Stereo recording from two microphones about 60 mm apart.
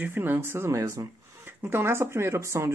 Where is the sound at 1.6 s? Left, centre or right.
Right.